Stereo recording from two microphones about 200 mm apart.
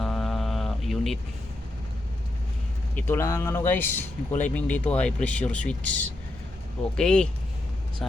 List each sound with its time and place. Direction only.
0.0 s mantra: centre (ahead or behind)
2.9 s speech: 15° left (ahead or behind)